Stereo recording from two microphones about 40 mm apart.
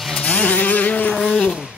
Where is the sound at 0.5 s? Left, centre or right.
Left.